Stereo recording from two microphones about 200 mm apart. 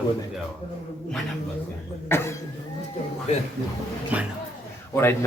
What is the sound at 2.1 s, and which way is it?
Speech, 10° left (ahead or behind).